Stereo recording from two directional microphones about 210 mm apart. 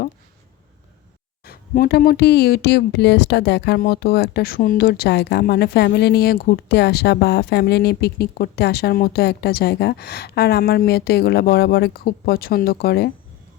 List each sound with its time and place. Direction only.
1.5 s speech: 45° left (ahead or behind)